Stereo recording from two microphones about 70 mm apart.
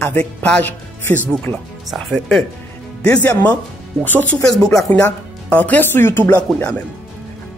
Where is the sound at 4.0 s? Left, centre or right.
Left.